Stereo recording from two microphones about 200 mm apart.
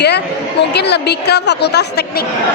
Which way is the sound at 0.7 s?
55° left (ahead or behind).